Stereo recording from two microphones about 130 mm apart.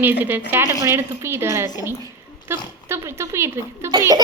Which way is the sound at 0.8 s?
20° right (ahead or behind).